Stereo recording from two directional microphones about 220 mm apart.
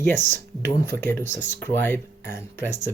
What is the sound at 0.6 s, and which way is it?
Speech, 10° left (ahead or behind).